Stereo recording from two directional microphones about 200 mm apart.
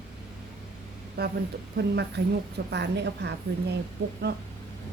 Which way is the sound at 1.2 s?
55° right (ahead or behind).